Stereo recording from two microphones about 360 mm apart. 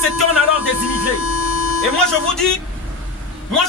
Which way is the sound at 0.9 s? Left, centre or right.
Left.